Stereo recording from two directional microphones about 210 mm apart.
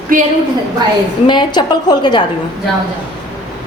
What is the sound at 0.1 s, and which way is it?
Speech, 40° right (ahead or behind).